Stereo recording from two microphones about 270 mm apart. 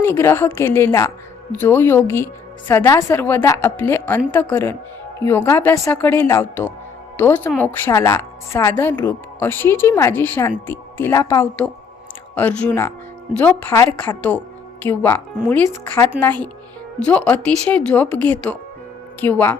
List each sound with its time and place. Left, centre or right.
0.0 s a woman's voice: centre